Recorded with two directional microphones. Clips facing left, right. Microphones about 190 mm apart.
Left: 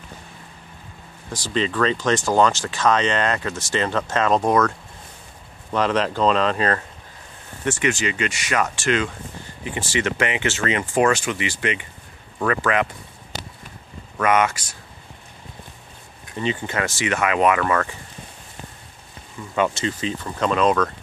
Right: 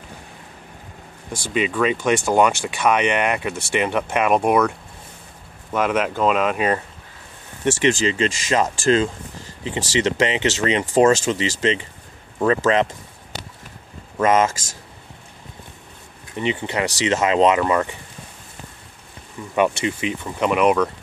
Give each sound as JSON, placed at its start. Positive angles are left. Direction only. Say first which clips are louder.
{"t": 1.5, "sound": "speech", "louder": "right 1 dB", "side_deg": -10}
{"t": 7.8, "sound": "speech", "louder": "right 5 dB", "side_deg": -30}
{"t": 14.1, "sound": "speech", "louder": "right 2 dB", "side_deg": -25}
{"t": 16.3, "sound": "speech", "louder": "right 2 dB", "side_deg": -20}
{"t": 19.5, "sound": "speech", "louder": "right 2 dB", "side_deg": -15}